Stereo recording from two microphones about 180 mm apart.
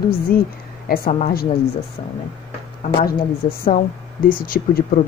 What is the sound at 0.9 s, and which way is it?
Speech, 45° left (ahead or behind).